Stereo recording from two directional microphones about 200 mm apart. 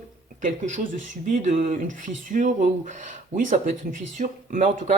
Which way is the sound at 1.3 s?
35° right (ahead or behind).